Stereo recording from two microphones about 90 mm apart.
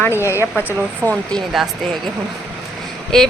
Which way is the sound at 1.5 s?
5° right (ahead or behind).